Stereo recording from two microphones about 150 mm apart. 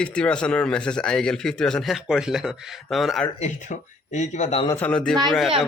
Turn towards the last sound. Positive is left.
turn(degrees=0)  # may be behind; listen again after turning